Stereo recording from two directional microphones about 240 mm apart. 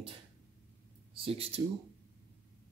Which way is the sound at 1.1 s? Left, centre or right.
Right.